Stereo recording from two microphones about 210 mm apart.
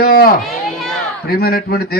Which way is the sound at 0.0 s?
45° left (ahead or behind).